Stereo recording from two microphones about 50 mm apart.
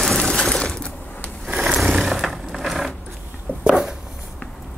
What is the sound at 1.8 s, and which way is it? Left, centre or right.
Vehicle, centre.